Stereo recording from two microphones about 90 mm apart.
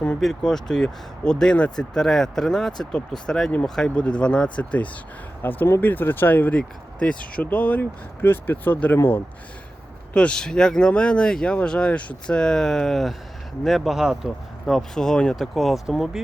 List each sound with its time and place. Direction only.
0.2 s speech: 5° left (ahead or behind); by 9.0 s 20° left (ahead or behind)
10.2 s speech: 10° left (ahead or behind)